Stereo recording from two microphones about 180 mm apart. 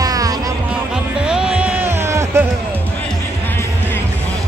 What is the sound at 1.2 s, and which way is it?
Music, 5° right (ahead or behind).